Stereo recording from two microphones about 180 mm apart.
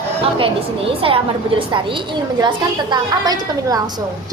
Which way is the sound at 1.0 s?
30° right (ahead or behind).